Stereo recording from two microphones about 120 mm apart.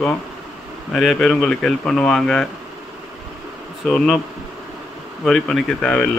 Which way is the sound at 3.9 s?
5° left (ahead or behind).